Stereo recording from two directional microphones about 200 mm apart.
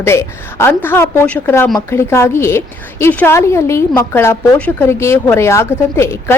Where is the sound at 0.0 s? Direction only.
10° left (ahead or behind).